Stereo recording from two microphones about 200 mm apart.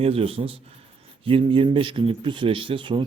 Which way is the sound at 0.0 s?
30° right (ahead or behind).